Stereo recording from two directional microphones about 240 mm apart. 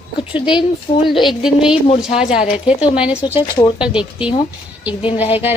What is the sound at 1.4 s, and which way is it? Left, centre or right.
A woman's voice, centre.